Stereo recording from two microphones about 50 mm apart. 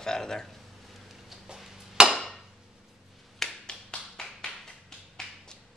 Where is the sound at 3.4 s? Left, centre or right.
Centre.